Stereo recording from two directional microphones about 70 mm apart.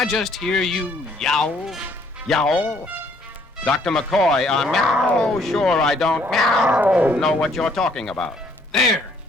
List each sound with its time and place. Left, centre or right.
0.0 s speech: centre
3.6 s speech: centre
6.7 s speech: right
7.4 s speech: centre